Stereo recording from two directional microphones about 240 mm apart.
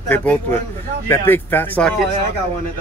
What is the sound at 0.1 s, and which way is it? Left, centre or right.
Speech, centre.